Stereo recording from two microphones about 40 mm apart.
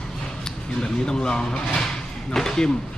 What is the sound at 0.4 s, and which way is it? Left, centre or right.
Speech, centre.